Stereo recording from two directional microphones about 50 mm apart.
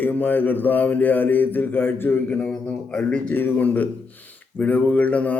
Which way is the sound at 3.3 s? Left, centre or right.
Left.